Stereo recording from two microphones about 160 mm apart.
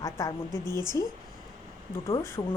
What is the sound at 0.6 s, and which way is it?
Speech, 25° right (ahead or behind).